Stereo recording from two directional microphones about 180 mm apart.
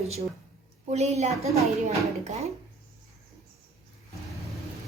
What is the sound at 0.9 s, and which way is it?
Speech, 40° right (ahead or behind).